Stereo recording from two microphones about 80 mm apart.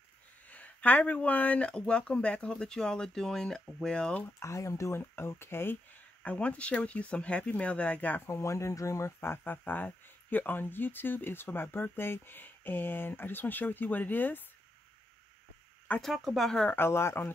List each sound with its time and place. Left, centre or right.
0.5 s speech: centre
4.2 s speech: left
6.2 s speech: centre
8.3 s speech: left
16.0 s speech: centre
16.6 s speech: left